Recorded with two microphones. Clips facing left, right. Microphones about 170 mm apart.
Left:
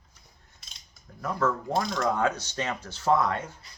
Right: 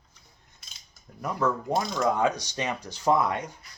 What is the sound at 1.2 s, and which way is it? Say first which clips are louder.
Speech: even; 15° right (ahead or behind).